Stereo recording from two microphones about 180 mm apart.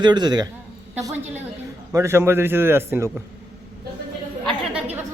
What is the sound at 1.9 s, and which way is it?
A man's voice, 15° right (ahead or behind).